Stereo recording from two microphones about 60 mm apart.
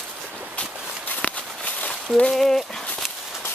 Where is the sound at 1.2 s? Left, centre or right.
Left.